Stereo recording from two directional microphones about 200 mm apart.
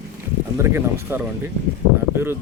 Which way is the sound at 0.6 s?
15° right (ahead or behind).